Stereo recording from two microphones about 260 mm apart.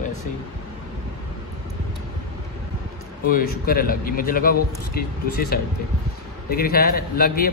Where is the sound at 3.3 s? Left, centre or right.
Left.